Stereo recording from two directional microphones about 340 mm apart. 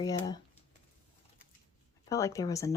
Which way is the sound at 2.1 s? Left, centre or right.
Centre.